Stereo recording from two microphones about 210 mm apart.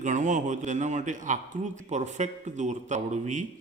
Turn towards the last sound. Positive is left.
turn(degrees=-35)  # may be behind; listen again after turning